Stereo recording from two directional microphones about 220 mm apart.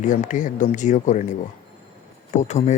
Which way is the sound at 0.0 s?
35° left (ahead or behind).